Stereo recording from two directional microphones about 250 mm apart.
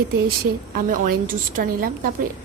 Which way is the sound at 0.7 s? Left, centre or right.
Right.